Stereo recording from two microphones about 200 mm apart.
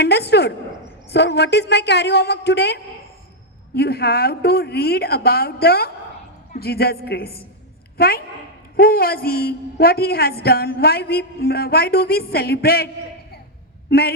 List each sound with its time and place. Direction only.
0.0 s a woman's voice: 55° left (ahead or behind)